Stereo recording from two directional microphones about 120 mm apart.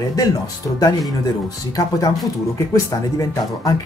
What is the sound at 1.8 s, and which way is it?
Speech, 30° left (ahead or behind).